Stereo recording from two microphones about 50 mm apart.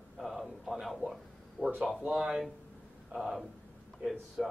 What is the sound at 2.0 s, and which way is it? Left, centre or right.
Speech, centre.